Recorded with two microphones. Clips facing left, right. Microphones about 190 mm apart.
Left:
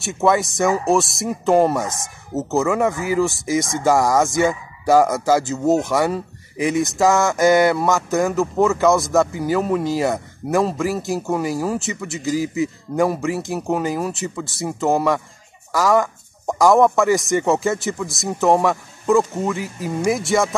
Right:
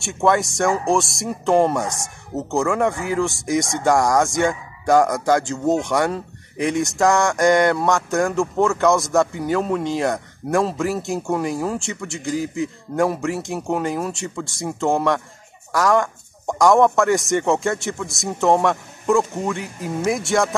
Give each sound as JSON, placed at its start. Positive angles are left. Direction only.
{"t": 0.0, "sound": "speech", "side_deg": 0}